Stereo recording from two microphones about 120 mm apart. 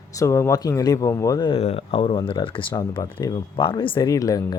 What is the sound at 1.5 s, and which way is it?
Speech, 55° left (ahead or behind).